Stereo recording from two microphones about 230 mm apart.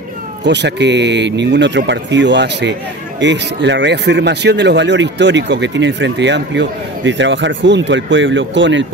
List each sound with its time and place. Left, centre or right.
0.4 s speech: right